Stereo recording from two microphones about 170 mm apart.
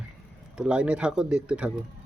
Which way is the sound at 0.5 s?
5° right (ahead or behind).